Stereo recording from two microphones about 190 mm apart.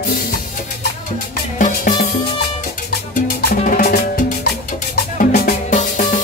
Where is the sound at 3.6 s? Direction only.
40° left (ahead or behind).